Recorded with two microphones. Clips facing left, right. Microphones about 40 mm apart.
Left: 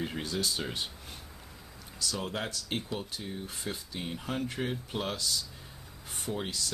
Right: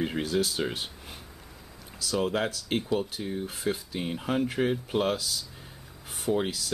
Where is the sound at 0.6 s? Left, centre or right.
Centre.